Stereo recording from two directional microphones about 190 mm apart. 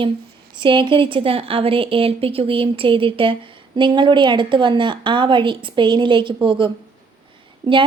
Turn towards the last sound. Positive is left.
turn(degrees=-25)  # may be behind; listen again after turning